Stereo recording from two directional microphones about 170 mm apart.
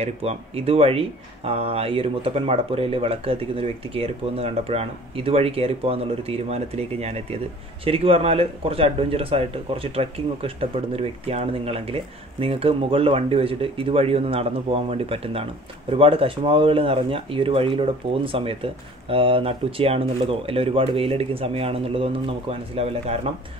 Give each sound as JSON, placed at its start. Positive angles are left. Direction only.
{"t": 0.0, "sound": "speech", "side_deg": -35}